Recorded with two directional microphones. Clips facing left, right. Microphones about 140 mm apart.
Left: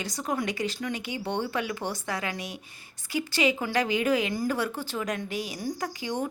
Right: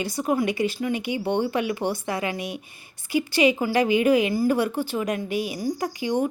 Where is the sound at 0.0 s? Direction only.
10° right (ahead or behind).